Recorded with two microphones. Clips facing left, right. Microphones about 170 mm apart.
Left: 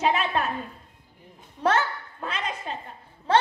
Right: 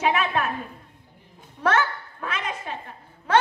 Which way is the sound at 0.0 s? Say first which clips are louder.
Right 1 dB; 35° left (ahead or behind).